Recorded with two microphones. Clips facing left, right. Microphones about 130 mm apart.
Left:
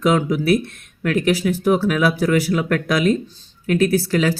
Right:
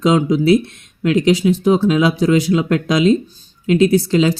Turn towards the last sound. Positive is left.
turn(degrees=-20)  # may be behind; listen again after turning